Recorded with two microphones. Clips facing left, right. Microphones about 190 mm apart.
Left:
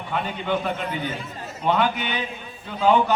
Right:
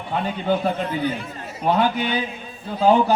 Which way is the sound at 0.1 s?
35° right (ahead or behind).